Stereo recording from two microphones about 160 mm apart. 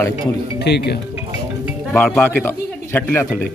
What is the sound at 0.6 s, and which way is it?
Speech, 90° left.